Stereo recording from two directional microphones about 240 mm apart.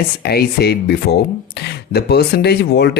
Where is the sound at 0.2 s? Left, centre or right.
Left.